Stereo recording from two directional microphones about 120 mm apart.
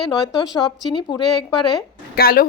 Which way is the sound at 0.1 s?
40° left (ahead or behind).